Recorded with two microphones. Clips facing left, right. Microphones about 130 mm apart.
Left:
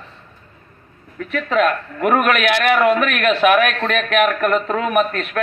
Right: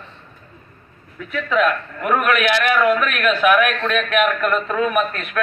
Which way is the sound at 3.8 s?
45° left (ahead or behind).